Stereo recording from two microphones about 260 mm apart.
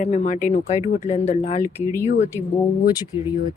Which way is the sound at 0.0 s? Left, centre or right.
Left.